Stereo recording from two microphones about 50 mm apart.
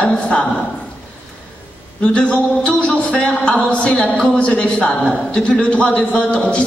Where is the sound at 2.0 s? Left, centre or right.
Left.